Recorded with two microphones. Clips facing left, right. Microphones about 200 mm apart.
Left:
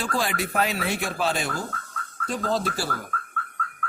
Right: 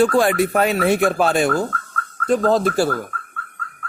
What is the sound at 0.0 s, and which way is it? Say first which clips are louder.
Speech: right 12 dB; 55° right (ahead or behind).